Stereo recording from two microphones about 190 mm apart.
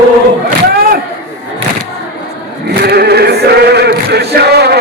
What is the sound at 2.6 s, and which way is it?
Male singing, 60° right (ahead or behind).